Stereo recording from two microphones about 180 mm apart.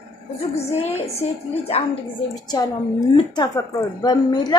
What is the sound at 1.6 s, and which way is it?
Speech, 35° left (ahead or behind).